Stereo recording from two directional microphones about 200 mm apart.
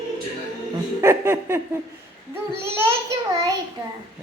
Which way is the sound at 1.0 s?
10° right (ahead or behind).